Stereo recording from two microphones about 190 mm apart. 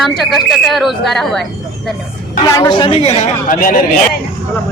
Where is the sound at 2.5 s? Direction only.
20° left (ahead or behind); by 3.8 s 45° left (ahead or behind).